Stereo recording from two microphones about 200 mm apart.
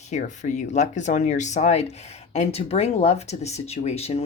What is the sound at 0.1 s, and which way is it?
Speech, 40° left (ahead or behind).